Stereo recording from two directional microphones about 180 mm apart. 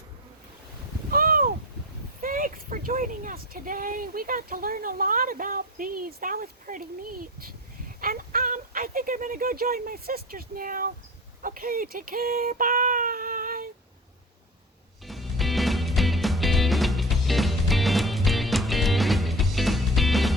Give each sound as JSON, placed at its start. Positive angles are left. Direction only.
{"t": 1.1, "sound": "a sound", "side_deg": -55}
{"t": 2.2, "sound": "speech", "side_deg": -50}
{"t": 11.4, "sound": "child singing", "side_deg": -55}
{"t": 15.0, "sound": "music", "side_deg": 0}